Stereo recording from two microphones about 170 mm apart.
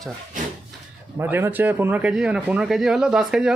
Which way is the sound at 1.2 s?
15° right (ahead or behind).